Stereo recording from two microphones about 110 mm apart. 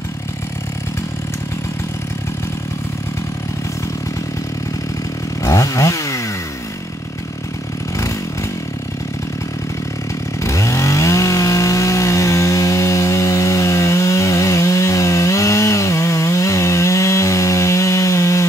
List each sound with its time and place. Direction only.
5.4 s chainsaw: 30° left (ahead or behind)
10.4 s chainsaw: 25° left (ahead or behind)